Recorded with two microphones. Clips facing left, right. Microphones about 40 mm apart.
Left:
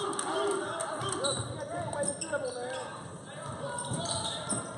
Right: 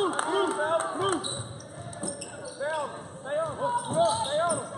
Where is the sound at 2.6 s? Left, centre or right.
Centre.